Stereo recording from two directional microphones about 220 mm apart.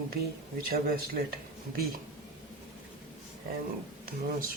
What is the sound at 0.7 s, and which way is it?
Speech, 45° right (ahead or behind).